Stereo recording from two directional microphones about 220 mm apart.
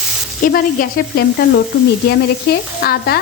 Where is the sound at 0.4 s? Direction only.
40° left (ahead or behind).